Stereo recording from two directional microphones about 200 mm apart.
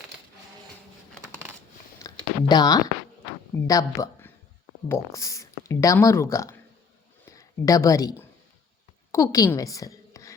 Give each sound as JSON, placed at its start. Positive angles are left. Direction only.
{"t": 2.0, "sound": "a sound", "side_deg": 20}
{"t": 3.7, "sound": "speech", "side_deg": 15}
{"t": 9.1, "sound": "a woman's voice", "side_deg": 15}